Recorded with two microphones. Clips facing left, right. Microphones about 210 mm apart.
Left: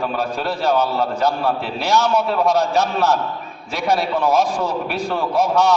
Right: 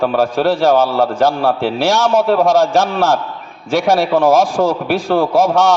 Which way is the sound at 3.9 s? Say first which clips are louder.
Right 5 dB; 90° right.